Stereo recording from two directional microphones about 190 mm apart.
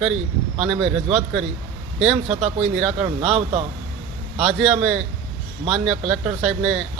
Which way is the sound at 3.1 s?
35° right (ahead or behind).